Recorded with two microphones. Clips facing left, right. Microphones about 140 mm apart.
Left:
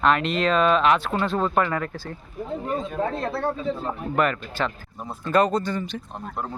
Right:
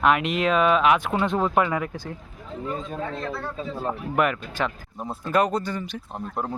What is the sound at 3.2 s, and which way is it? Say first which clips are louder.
Speech: left 5 dB; 55° left (ahead or behind).